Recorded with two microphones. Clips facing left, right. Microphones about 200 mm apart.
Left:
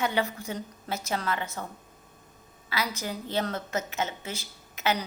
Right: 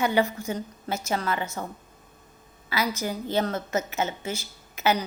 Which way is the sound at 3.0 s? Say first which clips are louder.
Right 4 dB; centre (ahead or behind).